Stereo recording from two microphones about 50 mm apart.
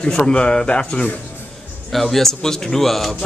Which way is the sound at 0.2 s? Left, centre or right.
Centre.